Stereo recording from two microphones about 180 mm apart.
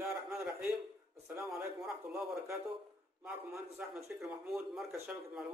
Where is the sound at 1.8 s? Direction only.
Centre (ahead or behind).